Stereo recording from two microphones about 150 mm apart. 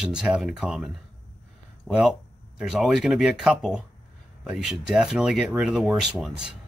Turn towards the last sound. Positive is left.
turn(degrees=-5)  # may be behind; listen again after turning